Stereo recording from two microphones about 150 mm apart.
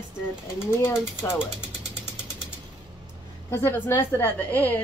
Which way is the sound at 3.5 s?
15° left (ahead or behind).